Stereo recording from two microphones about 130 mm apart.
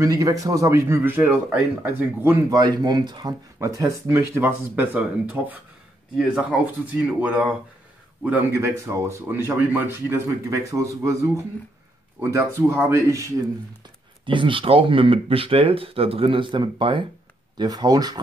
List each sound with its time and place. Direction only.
0.0 s speech: 25° right (ahead or behind)
2.6 s speech: 30° right (ahead or behind)
3.5 s a man's voice: 25° right (ahead or behind)
8.5 s speech: 20° right (ahead or behind)
14.2 s speech: 40° right (ahead or behind)